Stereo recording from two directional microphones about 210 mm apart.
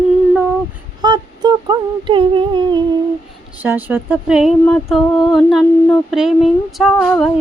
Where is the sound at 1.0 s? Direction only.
20° right (ahead or behind).